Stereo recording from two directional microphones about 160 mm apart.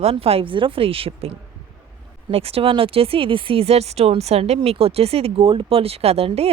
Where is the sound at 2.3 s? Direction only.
35° right (ahead or behind).